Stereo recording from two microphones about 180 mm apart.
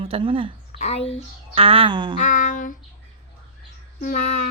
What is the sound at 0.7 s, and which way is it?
Speech, 35° left (ahead or behind).